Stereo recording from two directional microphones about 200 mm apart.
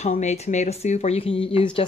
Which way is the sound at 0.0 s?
35° left (ahead or behind).